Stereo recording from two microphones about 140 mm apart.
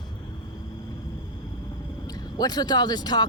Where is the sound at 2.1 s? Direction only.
30° left (ahead or behind).